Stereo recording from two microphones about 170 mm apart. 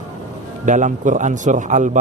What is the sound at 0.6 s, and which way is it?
Speech, 45° right (ahead or behind).